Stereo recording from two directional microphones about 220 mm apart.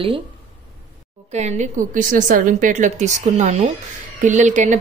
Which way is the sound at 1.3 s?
30° right (ahead or behind).